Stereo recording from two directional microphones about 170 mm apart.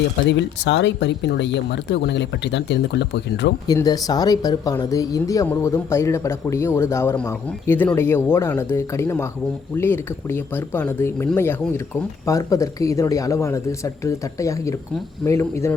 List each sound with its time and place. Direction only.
0.3 s speech: 90° left
3.7 s speech: 20° left (ahead or behind)